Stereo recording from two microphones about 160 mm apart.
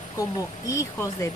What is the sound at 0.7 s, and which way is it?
Speech, 20° left (ahead or behind).